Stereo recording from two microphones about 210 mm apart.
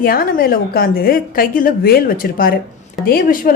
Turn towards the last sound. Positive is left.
turn(degrees=45)  # may be behind; listen again after turning